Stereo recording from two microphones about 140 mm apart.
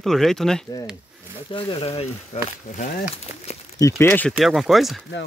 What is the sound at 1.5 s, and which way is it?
Speech, 40° left (ahead or behind).